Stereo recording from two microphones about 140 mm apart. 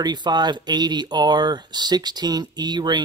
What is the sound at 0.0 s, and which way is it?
Speech, 30° right (ahead or behind).